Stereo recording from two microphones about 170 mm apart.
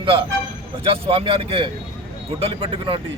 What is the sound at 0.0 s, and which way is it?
Speech, 30° right (ahead or behind).